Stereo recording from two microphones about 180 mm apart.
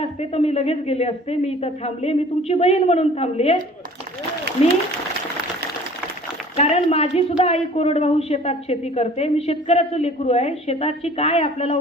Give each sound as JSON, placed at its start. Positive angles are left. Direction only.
{"t": 0.0, "sound": "a woman's voice", "side_deg": 35}
{"t": 6.6, "sound": "a woman's voice", "side_deg": 35}